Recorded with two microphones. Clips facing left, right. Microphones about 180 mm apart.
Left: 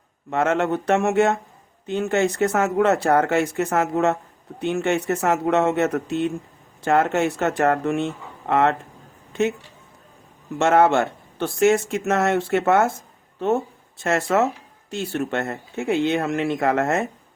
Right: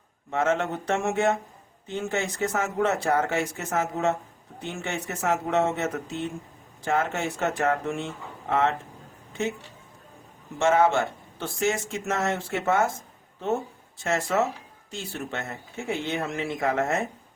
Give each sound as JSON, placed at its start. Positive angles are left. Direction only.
{"t": 0.3, "sound": "speech", "side_deg": 65}
{"t": 10.6, "sound": "speech", "side_deg": 65}
{"t": 14.0, "sound": "speech", "side_deg": 65}